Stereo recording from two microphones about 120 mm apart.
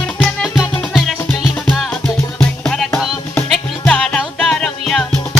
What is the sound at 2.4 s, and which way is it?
Music, 5° left (ahead or behind).